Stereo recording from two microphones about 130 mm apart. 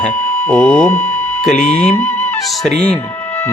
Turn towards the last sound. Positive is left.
turn(degrees=15)  # may be behind; listen again after turning